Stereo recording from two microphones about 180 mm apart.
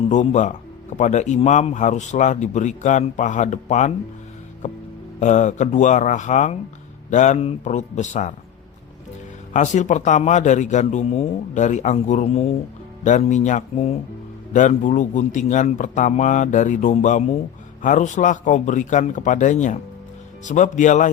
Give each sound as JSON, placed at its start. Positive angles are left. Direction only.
{"t": 0.0, "sound": "speech", "side_deg": 40}
{"t": 4.6, "sound": "music", "side_deg": 40}
{"t": 5.2, "sound": "speech", "side_deg": 40}
{"t": 9.5, "sound": "a man's voice", "side_deg": 45}